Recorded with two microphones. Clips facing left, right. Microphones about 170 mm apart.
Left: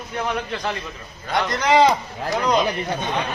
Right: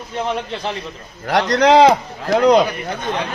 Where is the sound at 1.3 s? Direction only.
75° right (ahead or behind).